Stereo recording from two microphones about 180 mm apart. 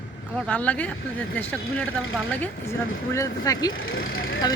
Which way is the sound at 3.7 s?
90° left.